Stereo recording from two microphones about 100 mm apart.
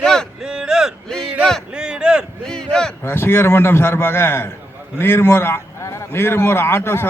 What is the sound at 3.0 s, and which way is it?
A man's voice, 25° left (ahead or behind).